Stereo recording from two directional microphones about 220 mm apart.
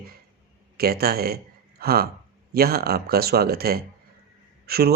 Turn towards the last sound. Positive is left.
turn(degrees=-45)  # may be behind; listen again after turning